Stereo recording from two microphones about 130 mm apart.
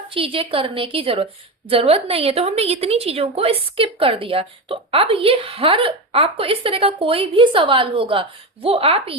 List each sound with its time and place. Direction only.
0.1 s a woman's voice: 45° right (ahead or behind)